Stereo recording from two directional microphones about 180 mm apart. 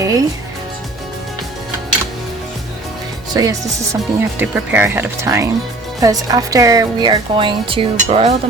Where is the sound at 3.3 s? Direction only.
20° right (ahead or behind).